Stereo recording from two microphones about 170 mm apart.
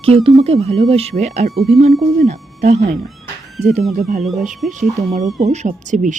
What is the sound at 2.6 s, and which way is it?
Speech, 40° right (ahead or behind).